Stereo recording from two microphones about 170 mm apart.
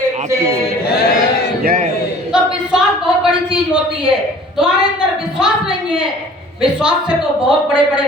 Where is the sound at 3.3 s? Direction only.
5° right (ahead or behind).